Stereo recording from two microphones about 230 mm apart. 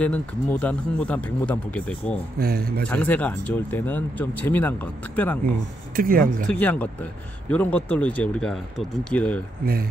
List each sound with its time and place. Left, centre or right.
0.0 s speech: centre
2.3 s speech: right
2.8 s speech: centre
5.9 s speech: right
6.6 s speech: centre